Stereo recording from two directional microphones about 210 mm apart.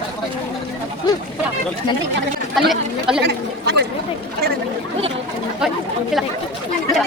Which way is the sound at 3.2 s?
50° right (ahead or behind).